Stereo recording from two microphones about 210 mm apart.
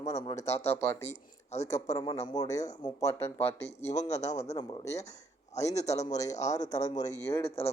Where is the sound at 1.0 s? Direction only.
30° left (ahead or behind).